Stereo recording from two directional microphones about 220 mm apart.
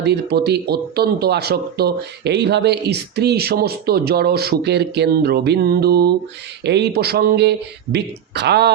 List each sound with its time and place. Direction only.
0.0 s speech: 50° right (ahead or behind)